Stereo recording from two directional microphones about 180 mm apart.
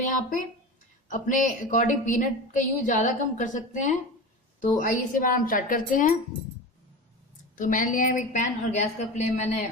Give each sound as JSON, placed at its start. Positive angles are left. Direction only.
{"t": 1.0, "sound": "a woman's voice", "side_deg": 45}
{"t": 7.5, "sound": "a woman's voice", "side_deg": 50}